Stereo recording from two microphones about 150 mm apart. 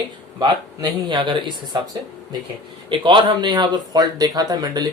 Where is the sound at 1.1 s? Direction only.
30° right (ahead or behind).